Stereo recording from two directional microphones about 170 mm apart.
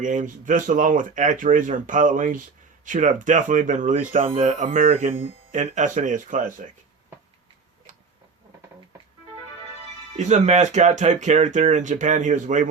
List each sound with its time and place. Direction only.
0.0 s speech: 50° right (ahead or behind)
4.2 s speech: 35° right (ahead or behind)
7.9 s tick-tock: 50° right (ahead or behind)
10.2 s speech: 45° right (ahead or behind)